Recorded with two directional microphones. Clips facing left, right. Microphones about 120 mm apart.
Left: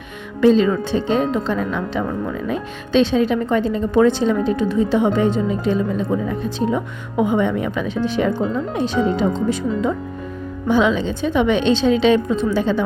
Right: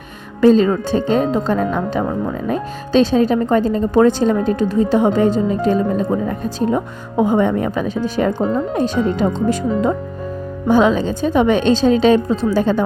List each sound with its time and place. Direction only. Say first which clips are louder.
0.4 s speech: right 2 dB; 40° right (ahead or behind)